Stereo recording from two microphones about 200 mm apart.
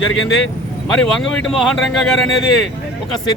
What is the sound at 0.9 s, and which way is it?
Speech, centre (ahead or behind).